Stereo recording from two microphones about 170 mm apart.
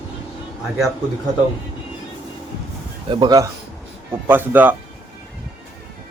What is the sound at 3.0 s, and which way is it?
Speech, 25° right (ahead or behind).